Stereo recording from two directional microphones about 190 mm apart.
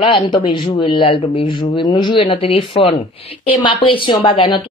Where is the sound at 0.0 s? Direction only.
25° left (ahead or behind).